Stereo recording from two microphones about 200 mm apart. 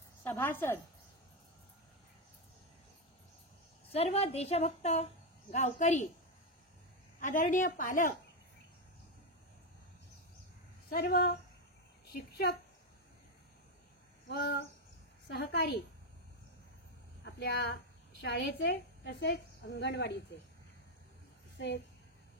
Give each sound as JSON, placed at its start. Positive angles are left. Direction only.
{"t": 0.2, "sound": "a woman's voice", "side_deg": 10}
{"t": 3.9, "sound": "a woman's voice", "side_deg": 30}
{"t": 7.2, "sound": "a woman's voice", "side_deg": 40}
{"t": 10.9, "sound": "a child's voice", "side_deg": 50}
{"t": 14.3, "sound": "a woman's voice", "side_deg": 55}
{"t": 18.1, "sound": "a woman's voice", "side_deg": 60}
{"t": 21.5, "sound": "a woman's voice", "side_deg": 60}